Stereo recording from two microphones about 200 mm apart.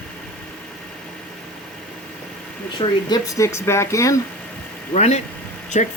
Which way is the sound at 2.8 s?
20° left (ahead or behind).